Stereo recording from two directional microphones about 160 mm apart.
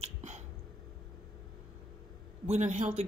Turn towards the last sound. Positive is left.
turn(degrees=-45)  # may be behind; listen again after turning